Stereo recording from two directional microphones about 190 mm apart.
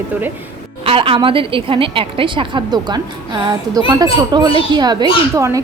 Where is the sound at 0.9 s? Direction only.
30° right (ahead or behind).